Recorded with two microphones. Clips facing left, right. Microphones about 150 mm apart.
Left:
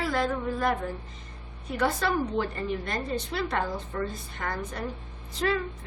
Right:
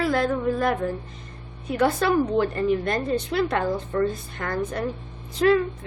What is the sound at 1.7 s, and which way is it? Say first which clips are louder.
A woman's voice: right 6 dB; 55° right (ahead or behind).